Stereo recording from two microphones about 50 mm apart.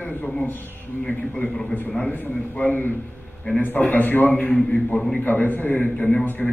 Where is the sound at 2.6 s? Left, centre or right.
Left.